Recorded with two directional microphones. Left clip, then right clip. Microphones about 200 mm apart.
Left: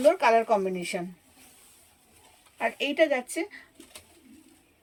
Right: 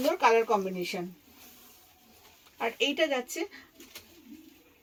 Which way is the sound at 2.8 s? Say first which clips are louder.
Left 3 dB; 20° left (ahead or behind).